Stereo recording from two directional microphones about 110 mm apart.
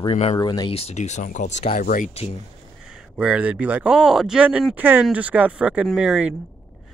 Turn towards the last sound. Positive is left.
turn(degrees=-5)  # may be behind; listen again after turning